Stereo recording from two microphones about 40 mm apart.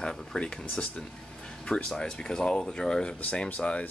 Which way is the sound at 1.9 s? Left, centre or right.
Centre.